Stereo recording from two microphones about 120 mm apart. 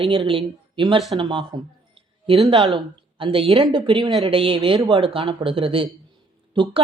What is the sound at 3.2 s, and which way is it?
Speech, 50° right (ahead or behind).